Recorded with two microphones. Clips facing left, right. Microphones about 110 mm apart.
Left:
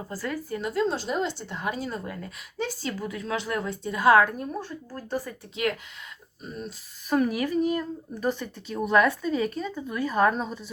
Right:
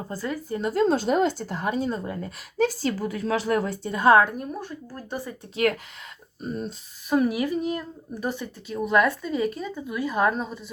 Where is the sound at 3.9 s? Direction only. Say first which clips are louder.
Right 1 dB; 25° right (ahead or behind).